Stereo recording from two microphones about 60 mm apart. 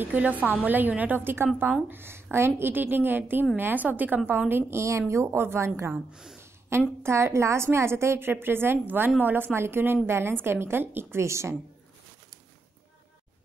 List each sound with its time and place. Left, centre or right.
0.0 s a woman's voice: right
4.5 s a woman's voice: right
5.9 s speech: centre
7.0 s a woman's voice: right